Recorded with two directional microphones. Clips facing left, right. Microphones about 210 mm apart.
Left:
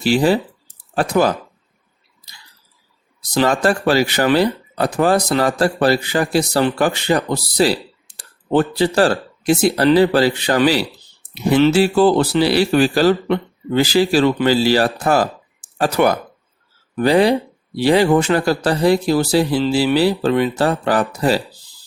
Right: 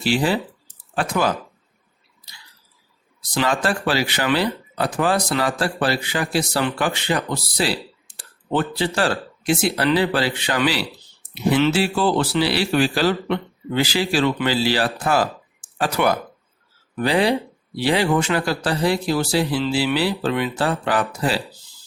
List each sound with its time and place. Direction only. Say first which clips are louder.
0.0 s speech: left 5 dB; 40° left (ahead or behind)
3.2 s speech: left 5 dB; 40° left (ahead or behind)